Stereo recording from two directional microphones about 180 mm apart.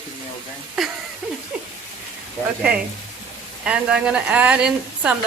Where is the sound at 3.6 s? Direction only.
5° right (ahead or behind).